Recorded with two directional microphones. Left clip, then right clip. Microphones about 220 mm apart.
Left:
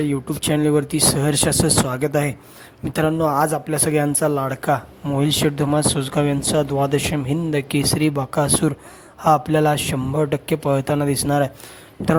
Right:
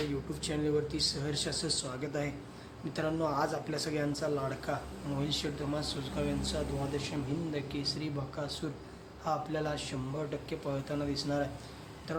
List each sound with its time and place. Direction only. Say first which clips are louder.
0.4 s speech: left 14 dB; 45° left (ahead or behind)